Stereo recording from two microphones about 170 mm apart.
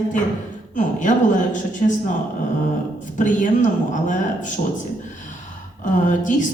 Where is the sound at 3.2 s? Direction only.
50° left (ahead or behind).